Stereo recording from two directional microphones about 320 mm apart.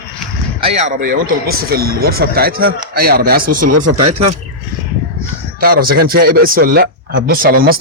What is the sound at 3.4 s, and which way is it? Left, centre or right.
Speech, right.